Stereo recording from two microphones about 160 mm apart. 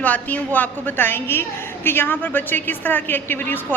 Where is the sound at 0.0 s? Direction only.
10° left (ahead or behind).